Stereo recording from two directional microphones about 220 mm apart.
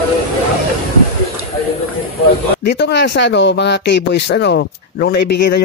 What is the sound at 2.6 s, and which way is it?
Speech, 50° left (ahead or behind).